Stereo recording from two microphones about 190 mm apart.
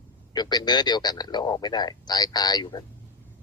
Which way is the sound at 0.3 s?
20° left (ahead or behind).